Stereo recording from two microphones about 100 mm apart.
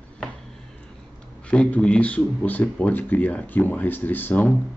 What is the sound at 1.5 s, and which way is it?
Speech, 15° left (ahead or behind).